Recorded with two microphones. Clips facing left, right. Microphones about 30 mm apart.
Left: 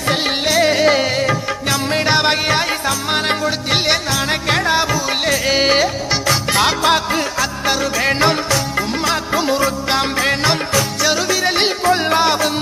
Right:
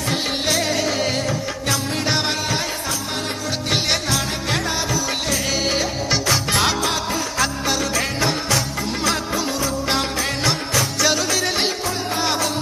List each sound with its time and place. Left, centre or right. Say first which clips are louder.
0.6 s music: left 7 dB; left
2.3 s music: left 6 dB; left
3.7 s music: left 2 dB; left
4.4 s music: left 9 dB; left
6.2 s music: left 5 dB; centre
6.8 s music: left 7 dB; left
7.6 s music: left 4 dB; left
8.2 s music: left 7 dB; left
8.9 s music: left 1 dB; centre
9.3 s music: left 6 dB; left
11.0 s music: left 3 dB; centre
12.2 s music: left 6 dB; left